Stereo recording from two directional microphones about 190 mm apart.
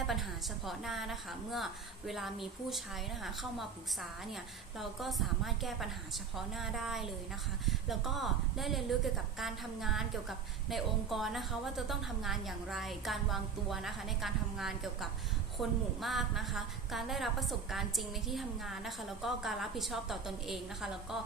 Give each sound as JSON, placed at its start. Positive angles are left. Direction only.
{"t": 0.1, "sound": "a woman's voice", "side_deg": 0}
{"t": 4.8, "sound": "a woman's voice", "side_deg": 0}